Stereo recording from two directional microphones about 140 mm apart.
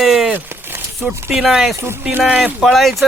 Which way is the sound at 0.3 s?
15° right (ahead or behind).